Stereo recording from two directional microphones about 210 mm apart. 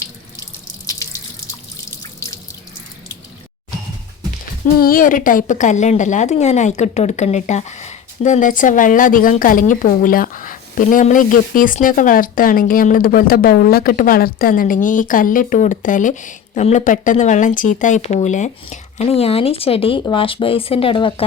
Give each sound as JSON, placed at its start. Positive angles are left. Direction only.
{"t": 0.9, "sound": "drip", "side_deg": 15}
{"t": 4.8, "sound": "a woman's voice", "side_deg": 40}